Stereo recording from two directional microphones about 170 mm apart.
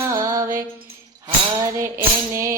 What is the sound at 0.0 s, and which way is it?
Music, 20° right (ahead or behind).